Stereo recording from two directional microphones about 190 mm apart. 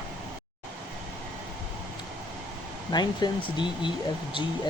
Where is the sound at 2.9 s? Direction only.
20° left (ahead or behind).